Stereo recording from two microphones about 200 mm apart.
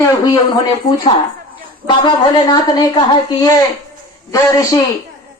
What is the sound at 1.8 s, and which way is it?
A man's voice, 20° left (ahead or behind).